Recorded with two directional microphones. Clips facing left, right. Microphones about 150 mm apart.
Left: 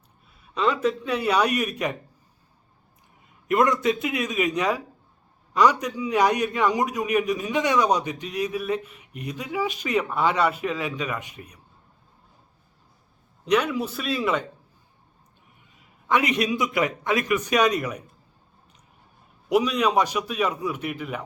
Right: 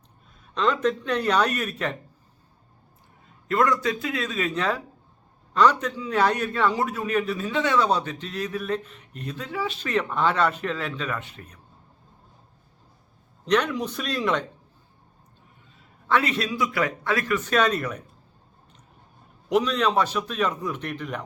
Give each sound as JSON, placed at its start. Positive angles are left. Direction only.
{"t": 0.5, "sound": "a man's voice", "side_deg": 10}
{"t": 3.5, "sound": "a man's voice", "side_deg": 20}
{"t": 13.4, "sound": "speech", "side_deg": 10}
{"t": 16.0, "sound": "a man's voice", "side_deg": 15}
{"t": 19.5, "sound": "a man's voice", "side_deg": 10}